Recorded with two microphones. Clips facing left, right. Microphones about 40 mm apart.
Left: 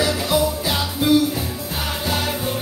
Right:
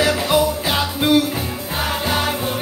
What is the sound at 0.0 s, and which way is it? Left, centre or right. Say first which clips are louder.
Music: right 3 dB; right.